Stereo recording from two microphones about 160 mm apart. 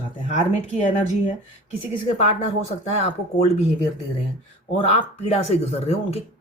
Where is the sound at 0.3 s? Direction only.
50° left (ahead or behind).